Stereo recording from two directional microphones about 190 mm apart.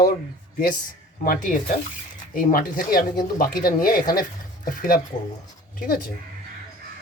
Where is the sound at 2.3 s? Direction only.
45° left (ahead or behind).